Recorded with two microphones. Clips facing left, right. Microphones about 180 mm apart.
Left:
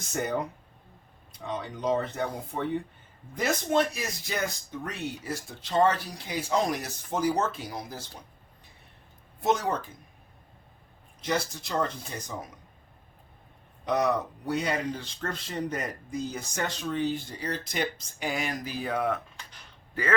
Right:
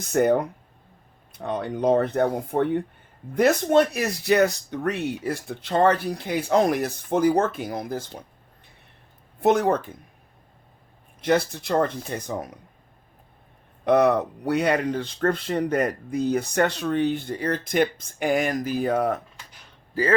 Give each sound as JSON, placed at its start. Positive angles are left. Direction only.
{"t": 0.1, "sound": "speech", "side_deg": -60}
{"t": 9.4, "sound": "speech", "side_deg": -60}
{"t": 11.2, "sound": "speech", "side_deg": -60}
{"t": 13.8, "sound": "a man's voice", "side_deg": -60}